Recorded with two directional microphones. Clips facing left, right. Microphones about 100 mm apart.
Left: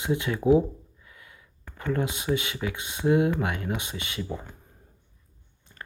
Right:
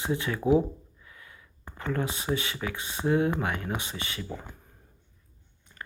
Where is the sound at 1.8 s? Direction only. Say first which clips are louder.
Left 2 dB; 20° left (ahead or behind).